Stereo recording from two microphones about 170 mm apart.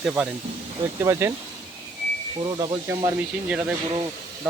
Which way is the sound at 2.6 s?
20° right (ahead or behind).